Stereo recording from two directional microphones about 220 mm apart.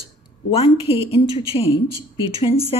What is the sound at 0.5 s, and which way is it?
Speech, 25° left (ahead or behind).